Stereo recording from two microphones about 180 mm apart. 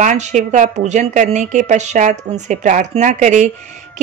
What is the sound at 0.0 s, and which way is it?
A woman's voice, 45° right (ahead or behind).